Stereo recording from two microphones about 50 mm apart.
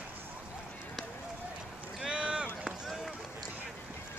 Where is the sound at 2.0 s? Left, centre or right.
Centre.